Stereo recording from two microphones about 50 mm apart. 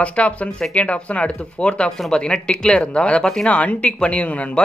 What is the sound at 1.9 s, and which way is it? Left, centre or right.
Speech, centre.